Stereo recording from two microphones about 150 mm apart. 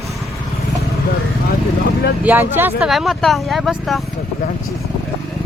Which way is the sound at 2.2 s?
10° right (ahead or behind).